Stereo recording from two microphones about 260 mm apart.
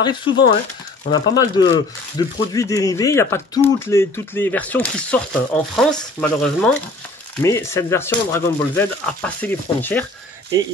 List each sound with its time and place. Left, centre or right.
0.0 s speech: centre